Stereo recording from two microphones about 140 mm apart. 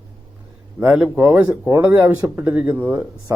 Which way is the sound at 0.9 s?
15° right (ahead or behind).